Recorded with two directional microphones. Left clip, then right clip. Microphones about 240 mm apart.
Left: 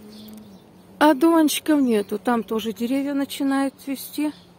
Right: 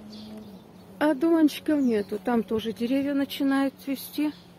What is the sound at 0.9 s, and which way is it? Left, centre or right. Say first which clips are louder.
Speech: left 7 dB; left.